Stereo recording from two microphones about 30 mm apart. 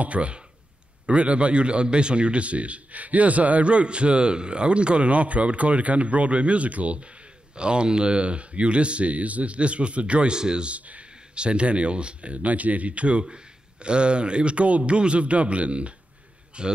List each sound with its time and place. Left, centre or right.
0.0 s a man's voice: right
7.5 s speech: right
10.3 s speech: right
10.7 s a man's voice: right
11.3 s a man's voice: right
13.3 s a man's voice: right
16.6 s speech: right